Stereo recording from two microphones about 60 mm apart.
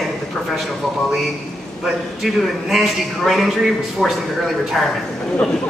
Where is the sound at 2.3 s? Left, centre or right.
Centre.